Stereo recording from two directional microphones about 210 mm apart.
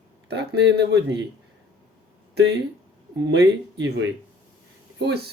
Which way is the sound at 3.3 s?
55° right (ahead or behind).